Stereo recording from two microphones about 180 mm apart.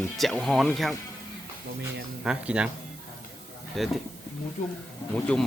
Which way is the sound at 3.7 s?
Centre (ahead or behind).